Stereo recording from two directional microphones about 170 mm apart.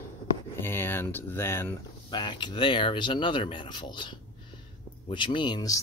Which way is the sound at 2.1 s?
25° left (ahead or behind).